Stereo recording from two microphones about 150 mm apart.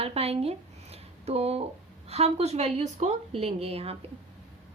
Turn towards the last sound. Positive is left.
turn(degrees=-40)  # may be behind; listen again after turning